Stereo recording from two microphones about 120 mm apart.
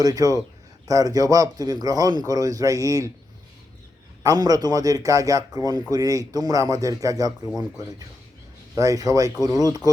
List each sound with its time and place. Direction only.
0.0 s speech: 30° right (ahead or behind)
4.2 s a man's voice: 30° right (ahead or behind)
8.7 s a man's voice: 30° right (ahead or behind)